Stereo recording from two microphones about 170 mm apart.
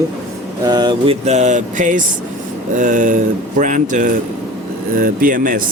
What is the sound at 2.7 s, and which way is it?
Speech, 50° right (ahead or behind).